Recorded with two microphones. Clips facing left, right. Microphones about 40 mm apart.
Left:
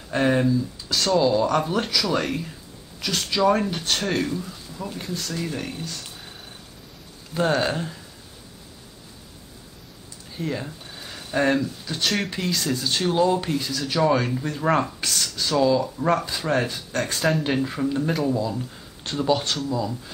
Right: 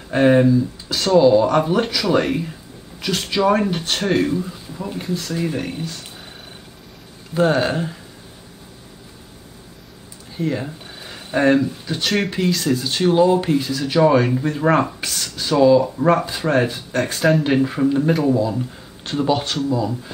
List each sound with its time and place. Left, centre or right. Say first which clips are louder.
0.1 s speech: right 7 dB; centre
7.3 s speech: right 5 dB; centre
10.3 s speech: right 6 dB; centre
12.0 s speech: right 5 dB; centre
15.2 s speech: right 7 dB; centre